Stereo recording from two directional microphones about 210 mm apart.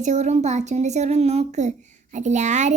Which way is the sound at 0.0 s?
35° right (ahead or behind).